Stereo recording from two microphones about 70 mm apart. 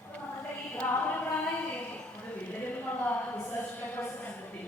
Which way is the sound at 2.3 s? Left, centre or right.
Left.